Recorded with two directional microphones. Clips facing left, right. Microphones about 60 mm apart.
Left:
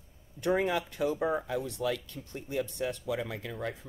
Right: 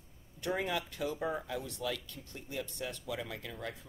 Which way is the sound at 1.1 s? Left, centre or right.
Left.